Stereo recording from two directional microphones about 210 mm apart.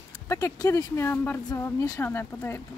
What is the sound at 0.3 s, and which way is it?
A woman's voice, 15° left (ahead or behind).